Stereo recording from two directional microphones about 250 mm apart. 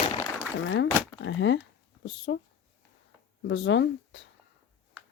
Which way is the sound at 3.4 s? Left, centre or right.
Left.